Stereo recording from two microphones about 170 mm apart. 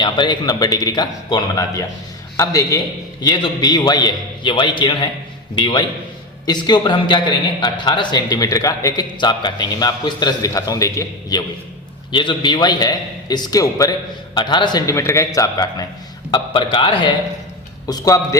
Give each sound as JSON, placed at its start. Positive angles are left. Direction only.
{"t": 0.0, "sound": "a man's voice", "side_deg": 25}